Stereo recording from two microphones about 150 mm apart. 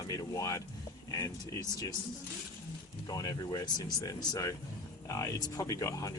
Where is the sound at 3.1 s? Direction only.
25° left (ahead or behind).